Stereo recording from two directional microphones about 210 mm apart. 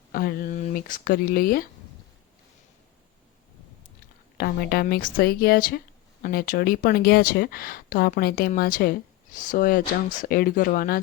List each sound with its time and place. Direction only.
0.1 s speech: 45° left (ahead or behind)
4.4 s speech: 45° left (ahead or behind)